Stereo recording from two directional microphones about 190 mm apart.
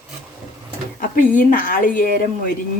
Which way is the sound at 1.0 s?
45° left (ahead or behind).